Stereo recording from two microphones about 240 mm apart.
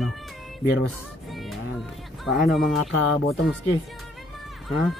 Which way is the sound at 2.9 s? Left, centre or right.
Left.